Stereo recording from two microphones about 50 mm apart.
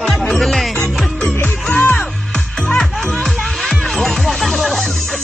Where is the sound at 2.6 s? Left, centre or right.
Centre.